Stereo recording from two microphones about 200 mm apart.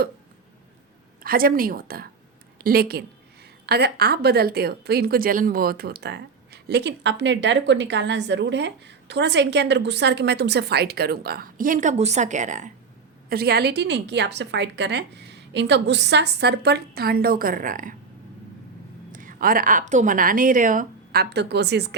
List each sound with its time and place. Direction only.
1.2 s a woman's voice: 45° right (ahead or behind)
13.3 s a woman's voice: 55° right (ahead or behind)
19.1 s a woman's voice: 45° right (ahead or behind)